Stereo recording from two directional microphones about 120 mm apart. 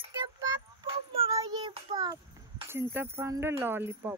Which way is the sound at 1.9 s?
35° right (ahead or behind).